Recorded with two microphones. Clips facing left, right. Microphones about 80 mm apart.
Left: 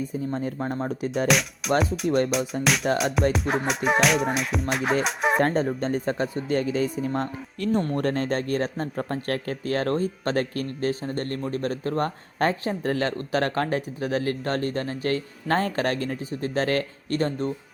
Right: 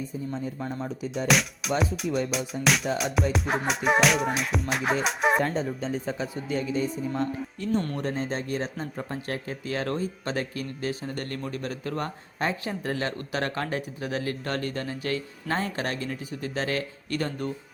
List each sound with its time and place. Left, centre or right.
0.6 s speech: left
1.3 s speech: centre
1.8 s music: centre
2.0 s speech: left
2.3 s music: centre
5.4 s speech: left
7.9 s speech: left
11.0 s speech: left
17.2 s speech: left